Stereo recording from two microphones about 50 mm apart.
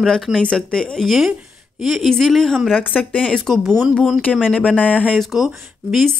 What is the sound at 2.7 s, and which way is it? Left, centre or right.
Speech, left.